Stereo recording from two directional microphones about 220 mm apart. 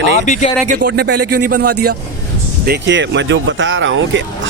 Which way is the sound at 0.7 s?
45° right (ahead or behind).